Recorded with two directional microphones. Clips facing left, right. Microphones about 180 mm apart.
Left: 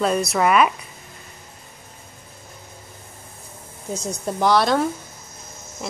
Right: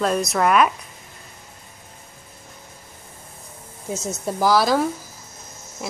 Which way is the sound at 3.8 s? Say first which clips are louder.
Even; 5° right (ahead or behind).